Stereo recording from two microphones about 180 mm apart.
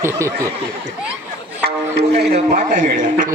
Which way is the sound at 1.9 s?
65° right (ahead or behind).